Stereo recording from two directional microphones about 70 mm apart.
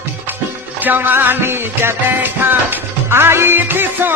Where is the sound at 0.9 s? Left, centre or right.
Right.